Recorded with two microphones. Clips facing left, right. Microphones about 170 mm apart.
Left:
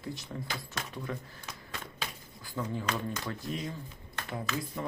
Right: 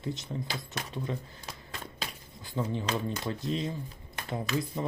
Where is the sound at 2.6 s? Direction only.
25° right (ahead or behind).